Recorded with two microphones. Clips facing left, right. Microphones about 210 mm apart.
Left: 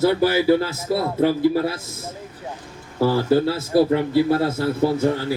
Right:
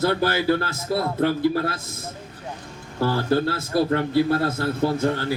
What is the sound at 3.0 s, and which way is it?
Speech, 5° left (ahead or behind).